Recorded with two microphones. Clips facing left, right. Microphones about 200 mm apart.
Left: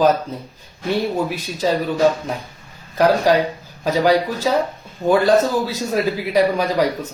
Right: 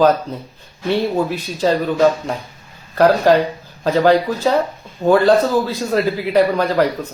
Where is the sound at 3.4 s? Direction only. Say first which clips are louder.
Right 1 dB; 10° left (ahead or behind).